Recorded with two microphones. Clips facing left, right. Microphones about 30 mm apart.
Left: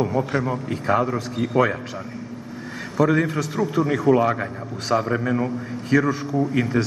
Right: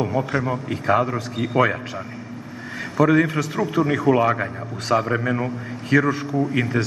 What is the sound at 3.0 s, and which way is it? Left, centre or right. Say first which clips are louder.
A man's voice: right 2 dB; centre.